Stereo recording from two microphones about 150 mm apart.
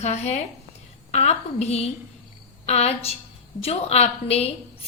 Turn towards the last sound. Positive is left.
turn(degrees=45)  # may be behind; listen again after turning